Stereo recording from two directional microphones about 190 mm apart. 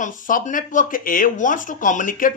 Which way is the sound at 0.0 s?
45° left (ahead or behind).